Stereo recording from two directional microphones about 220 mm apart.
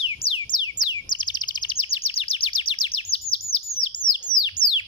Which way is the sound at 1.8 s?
25° left (ahead or behind).